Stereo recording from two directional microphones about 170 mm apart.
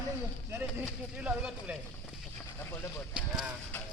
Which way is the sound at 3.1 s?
5° right (ahead or behind).